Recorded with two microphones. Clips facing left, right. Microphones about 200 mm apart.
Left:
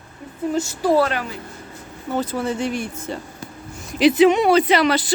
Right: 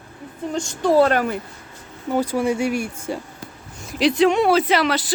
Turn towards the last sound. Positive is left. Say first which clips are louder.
# left 2 dB
turn(degrees=0)  # may be behind; listen again after turning